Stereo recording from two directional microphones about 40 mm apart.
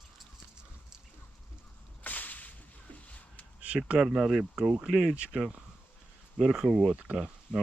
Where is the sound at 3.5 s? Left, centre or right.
Right.